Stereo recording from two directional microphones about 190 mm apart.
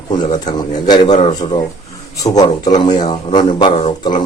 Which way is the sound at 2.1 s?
20° left (ahead or behind).